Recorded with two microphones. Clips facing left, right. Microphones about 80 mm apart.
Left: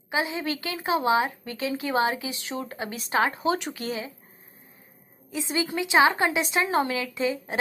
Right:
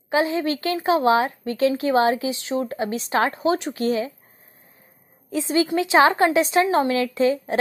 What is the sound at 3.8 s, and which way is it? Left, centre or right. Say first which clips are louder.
Speech: right 9 dB; right.